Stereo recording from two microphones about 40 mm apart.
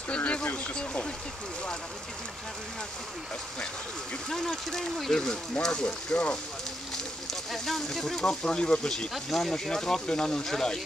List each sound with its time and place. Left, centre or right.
0.1 s a sound: left
5.1 s speech: centre
7.5 s speech: centre
8.3 s speech: centre